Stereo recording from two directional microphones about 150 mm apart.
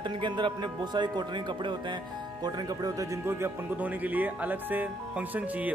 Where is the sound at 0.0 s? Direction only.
30° right (ahead or behind).